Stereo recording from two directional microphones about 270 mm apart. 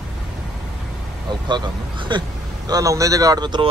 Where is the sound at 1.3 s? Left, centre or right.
Centre.